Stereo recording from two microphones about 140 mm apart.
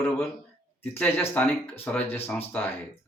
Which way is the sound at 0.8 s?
15° left (ahead or behind).